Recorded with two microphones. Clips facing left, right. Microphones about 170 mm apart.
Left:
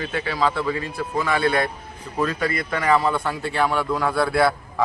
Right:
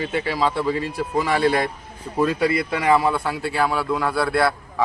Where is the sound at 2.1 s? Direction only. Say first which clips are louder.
Right 4 dB; 10° right (ahead or behind).